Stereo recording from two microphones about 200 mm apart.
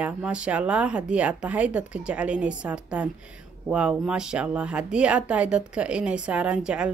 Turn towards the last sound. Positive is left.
turn(degrees=-5)  # may be behind; listen again after turning